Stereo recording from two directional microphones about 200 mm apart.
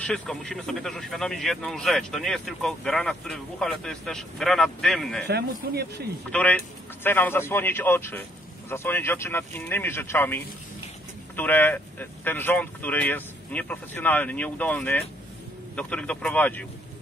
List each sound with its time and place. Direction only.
0.0 s a man's voice: 5° left (ahead or behind)
5.3 s speech: 55° right (ahead or behind)
7.0 s speech: 10° left (ahead or behind)